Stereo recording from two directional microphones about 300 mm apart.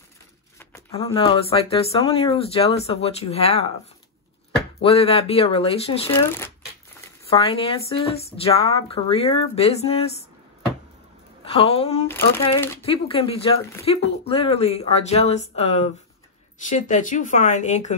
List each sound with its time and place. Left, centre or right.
0.6 s speech: centre
4.8 s speech: centre
6.1 s speech: centre
7.2 s speech: centre
11.4 s speech: centre
12.1 s speech: centre
12.9 s speech: centre